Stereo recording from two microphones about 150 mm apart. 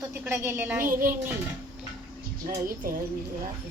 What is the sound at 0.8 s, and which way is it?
Speech, 65° right (ahead or behind).